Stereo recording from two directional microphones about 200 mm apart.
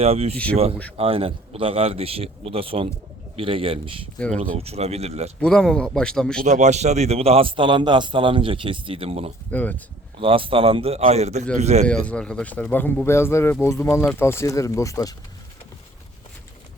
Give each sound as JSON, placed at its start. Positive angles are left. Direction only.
{"t": 0.0, "sound": "a man's voice", "side_deg": -30}
{"t": 5.4, "sound": "speech", "side_deg": 5}
{"t": 6.4, "sound": "a man's voice", "side_deg": -35}
{"t": 9.5, "sound": "speech", "side_deg": 10}
{"t": 10.2, "sound": "a man's voice", "side_deg": -25}
{"t": 11.9, "sound": "speech", "side_deg": 5}